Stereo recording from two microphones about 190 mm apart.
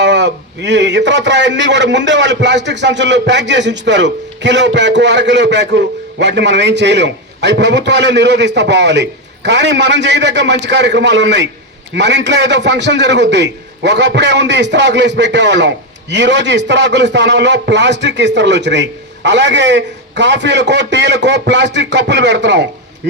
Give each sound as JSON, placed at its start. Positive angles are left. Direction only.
{"t": 0.0, "sound": "a man's voice", "side_deg": -65}